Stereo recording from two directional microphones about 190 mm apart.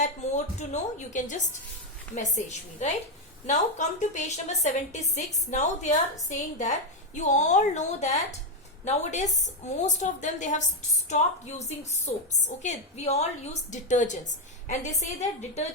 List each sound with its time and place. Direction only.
0.0 s a woman's voice: 40° left (ahead or behind)
11.8 s a woman's voice: 35° left (ahead or behind)